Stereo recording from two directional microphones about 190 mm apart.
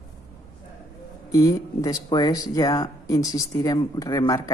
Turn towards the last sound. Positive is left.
turn(degrees=20)  # may be behind; listen again after turning